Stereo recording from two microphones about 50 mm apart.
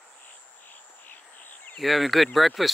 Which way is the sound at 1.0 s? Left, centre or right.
Left.